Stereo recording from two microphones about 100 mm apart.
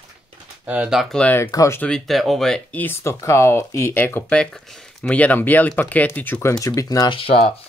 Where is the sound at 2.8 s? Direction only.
25° left (ahead or behind).